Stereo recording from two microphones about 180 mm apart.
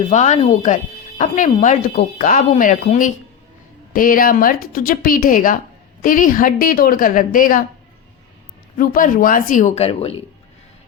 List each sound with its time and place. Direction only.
0.1 s speech: 40° left (ahead or behind)
8.8 s speech: 50° left (ahead or behind); by 10.2 s 35° left (ahead or behind)